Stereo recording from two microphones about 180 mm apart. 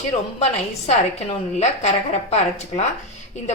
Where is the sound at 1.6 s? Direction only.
40° left (ahead or behind).